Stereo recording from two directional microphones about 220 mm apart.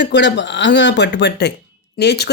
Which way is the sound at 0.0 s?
50° left (ahead or behind).